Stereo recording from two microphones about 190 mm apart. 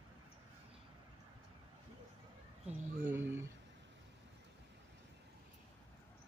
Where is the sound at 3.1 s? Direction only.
10° right (ahead or behind).